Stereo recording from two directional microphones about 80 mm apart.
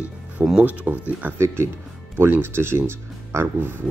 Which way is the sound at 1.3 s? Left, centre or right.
Right.